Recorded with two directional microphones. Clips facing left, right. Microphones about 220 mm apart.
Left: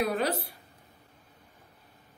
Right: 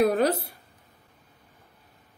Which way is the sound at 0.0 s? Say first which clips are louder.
Right 7 dB; 45° right (ahead or behind).